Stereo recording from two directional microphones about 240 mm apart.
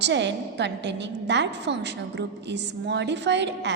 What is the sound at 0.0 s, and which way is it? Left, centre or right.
A woman's voice, right.